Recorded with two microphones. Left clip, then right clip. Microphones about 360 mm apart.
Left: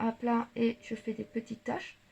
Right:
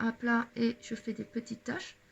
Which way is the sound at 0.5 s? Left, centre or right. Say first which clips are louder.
Left 2 dB; left.